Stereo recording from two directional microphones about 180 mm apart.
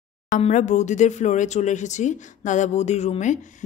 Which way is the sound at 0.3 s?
40° left (ahead or behind).